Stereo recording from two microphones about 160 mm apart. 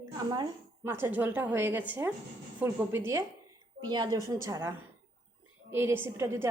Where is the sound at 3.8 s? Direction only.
25° right (ahead or behind).